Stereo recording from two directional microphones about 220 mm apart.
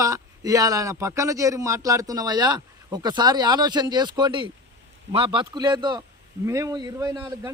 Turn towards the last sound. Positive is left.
turn(degrees=-15)  # may be behind; listen again after turning